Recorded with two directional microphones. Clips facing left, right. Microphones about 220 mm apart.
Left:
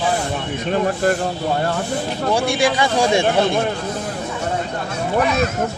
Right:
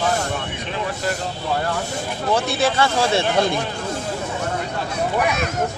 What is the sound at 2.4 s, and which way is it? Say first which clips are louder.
Speech: left 2 dB; 10° left (ahead or behind).